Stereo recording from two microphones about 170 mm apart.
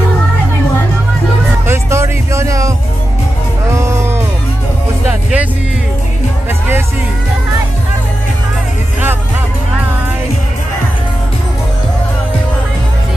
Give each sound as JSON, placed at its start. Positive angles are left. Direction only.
{"t": 1.7, "sound": "music", "side_deg": -15}
{"t": 3.7, "sound": "music", "side_deg": -15}